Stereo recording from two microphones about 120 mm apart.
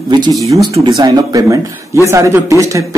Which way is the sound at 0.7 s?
45° right (ahead or behind).